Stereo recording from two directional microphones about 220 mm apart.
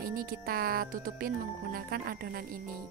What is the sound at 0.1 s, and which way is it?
Speech, 40° right (ahead or behind).